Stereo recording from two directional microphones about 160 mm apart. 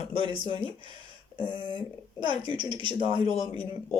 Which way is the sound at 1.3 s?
30° left (ahead or behind).